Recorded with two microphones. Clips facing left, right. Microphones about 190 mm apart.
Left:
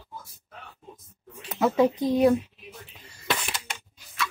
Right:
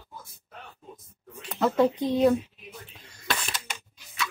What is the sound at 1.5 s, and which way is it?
Speech, 5° left (ahead or behind).